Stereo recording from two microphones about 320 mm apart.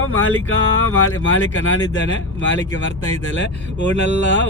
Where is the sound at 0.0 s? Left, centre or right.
Left.